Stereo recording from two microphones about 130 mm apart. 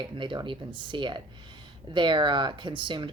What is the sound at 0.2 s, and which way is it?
Speech, 40° right (ahead or behind).